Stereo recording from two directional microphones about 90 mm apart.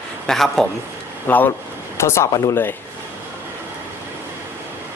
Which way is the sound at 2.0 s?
30° left (ahead or behind).